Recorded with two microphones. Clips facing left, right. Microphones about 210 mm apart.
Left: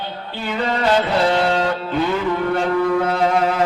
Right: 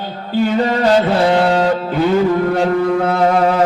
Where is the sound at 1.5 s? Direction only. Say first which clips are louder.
Right 5 dB; 40° right (ahead or behind).